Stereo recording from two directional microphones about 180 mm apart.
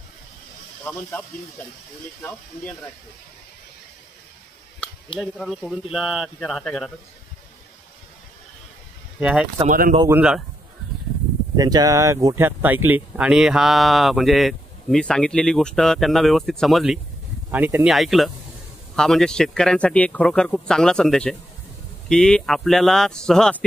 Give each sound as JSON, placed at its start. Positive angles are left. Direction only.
{"t": 0.8, "sound": "speech", "side_deg": 10}
{"t": 2.2, "sound": "speech", "side_deg": 10}
{"t": 5.2, "sound": "speech", "side_deg": 0}
{"t": 9.2, "sound": "speech", "side_deg": -5}
{"t": 9.7, "sound": "speech", "side_deg": -50}
{"t": 10.0, "sound": "speech", "side_deg": -10}
{"t": 11.5, "sound": "speech", "side_deg": -20}